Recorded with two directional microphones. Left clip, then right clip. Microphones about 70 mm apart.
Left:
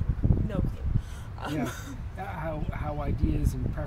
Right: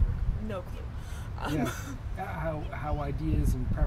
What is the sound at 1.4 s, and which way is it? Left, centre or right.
Speech, centre.